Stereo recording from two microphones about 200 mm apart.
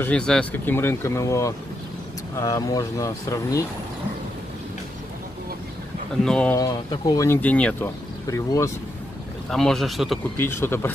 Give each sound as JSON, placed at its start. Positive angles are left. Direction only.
{"t": 0.0, "sound": "speech", "side_deg": 5}
{"t": 6.2, "sound": "speech", "side_deg": 5}
{"t": 6.6, "sound": "speech", "side_deg": 20}
{"t": 9.5, "sound": "speech", "side_deg": 0}
{"t": 10.4, "sound": "speech", "side_deg": 10}